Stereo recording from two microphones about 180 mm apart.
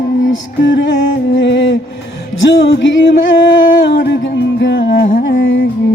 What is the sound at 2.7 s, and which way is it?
Music, 70° left (ahead or behind).